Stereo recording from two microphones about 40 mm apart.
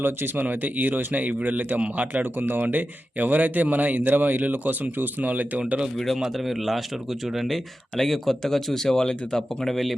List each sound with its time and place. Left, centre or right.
0.0 s speech: right
0.4 s speech: right
2.4 s speech: right
2.6 s speech: right
6.3 s speech: centre
7.4 s speech: centre